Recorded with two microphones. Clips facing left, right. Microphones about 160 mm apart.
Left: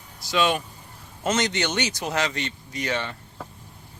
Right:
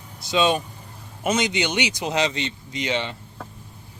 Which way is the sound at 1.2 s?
10° right (ahead or behind).